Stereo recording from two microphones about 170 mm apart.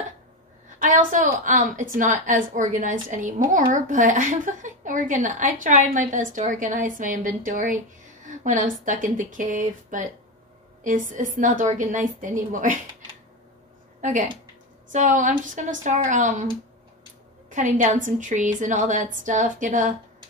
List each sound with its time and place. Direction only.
0.7 s a woman's voice: 50° right (ahead or behind)
14.0 s a woman's voice: 50° right (ahead or behind)
17.5 s a woman's voice: 50° right (ahead or behind)